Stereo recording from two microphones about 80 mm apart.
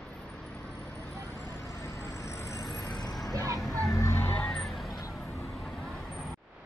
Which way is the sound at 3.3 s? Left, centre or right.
Right.